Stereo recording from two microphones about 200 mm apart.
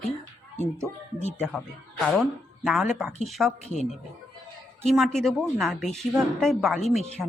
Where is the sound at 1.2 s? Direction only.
35° left (ahead or behind).